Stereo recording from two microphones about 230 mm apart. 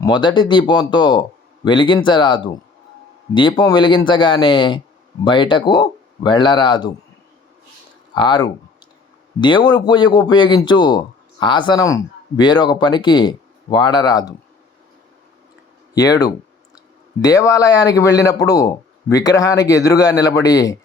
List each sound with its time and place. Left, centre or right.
0.0 s speech: centre
8.1 s speech: centre
16.0 s speech: centre